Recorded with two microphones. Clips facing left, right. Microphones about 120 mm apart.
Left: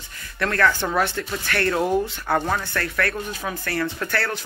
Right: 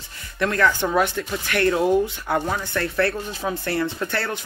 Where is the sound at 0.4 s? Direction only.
15° right (ahead or behind).